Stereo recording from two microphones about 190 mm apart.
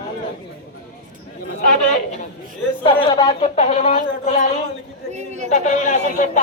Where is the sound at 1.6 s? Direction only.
40° left (ahead or behind).